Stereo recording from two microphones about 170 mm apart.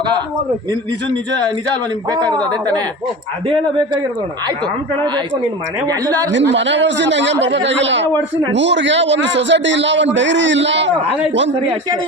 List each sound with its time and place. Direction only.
2.0 s a man's voice: 25° right (ahead or behind)
3.4 s a man's voice: 30° right (ahead or behind)
6.3 s a man's voice: 90° right